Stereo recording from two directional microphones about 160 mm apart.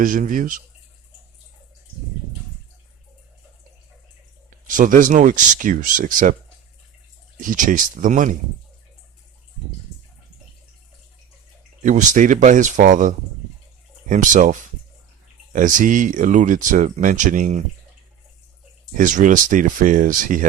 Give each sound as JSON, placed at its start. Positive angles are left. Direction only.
{"t": 0.0, "sound": "speech", "side_deg": -55}
{"t": 4.7, "sound": "speech", "side_deg": -55}
{"t": 7.4, "sound": "speech", "side_deg": -55}
{"t": 11.8, "sound": "speech", "side_deg": -50}
{"t": 18.9, "sound": "speech", "side_deg": -55}